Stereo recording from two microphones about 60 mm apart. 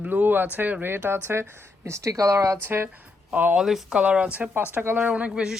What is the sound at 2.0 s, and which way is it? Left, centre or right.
Speech, right.